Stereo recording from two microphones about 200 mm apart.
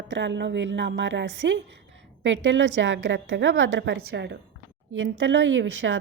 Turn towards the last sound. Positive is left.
turn(degrees=-70)  # may be behind; listen again after turning